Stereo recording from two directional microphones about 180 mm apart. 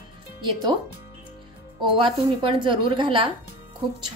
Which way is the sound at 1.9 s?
25° right (ahead or behind).